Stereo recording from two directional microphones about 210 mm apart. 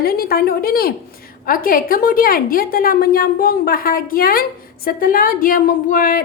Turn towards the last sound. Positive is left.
turn(degrees=40)  # may be behind; listen again after turning